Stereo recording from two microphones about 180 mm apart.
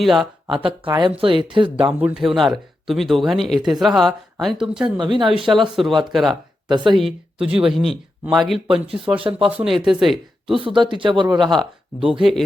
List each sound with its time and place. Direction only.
0.0 s speech: centre (ahead or behind)
0.5 s speech: 25° right (ahead or behind)
2.0 s speech: 5° right (ahead or behind)
4.9 s speech: 25° right (ahead or behind)
5.4 s speech: centre (ahead or behind)
6.7 s speech: 25° right (ahead or behind)
7.0 s speech: 5° right (ahead or behind)
10.5 s speech: 30° right (ahead or behind)
11.5 s speech: centre (ahead or behind)